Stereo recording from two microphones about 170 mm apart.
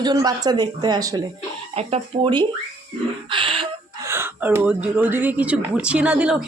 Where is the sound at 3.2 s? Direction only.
30° right (ahead or behind).